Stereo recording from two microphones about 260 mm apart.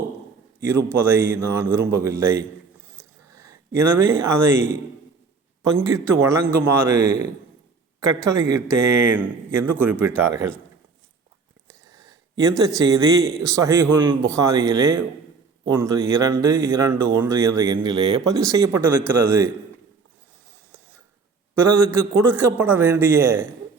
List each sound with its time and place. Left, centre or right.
0.9 s speech: centre
2.9 s a sound: centre
5.6 s speech: centre
8.3 s speech: centre
11.7 s a sound: centre
13.4 s speech: centre
21.5 s speech: centre